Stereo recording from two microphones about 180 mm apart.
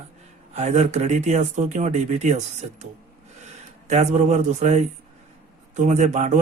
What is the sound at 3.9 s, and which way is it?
Speech, 40° right (ahead or behind).